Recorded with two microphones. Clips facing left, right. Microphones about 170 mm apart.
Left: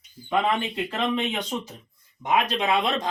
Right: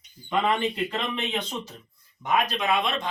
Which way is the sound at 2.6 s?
35° left (ahead or behind).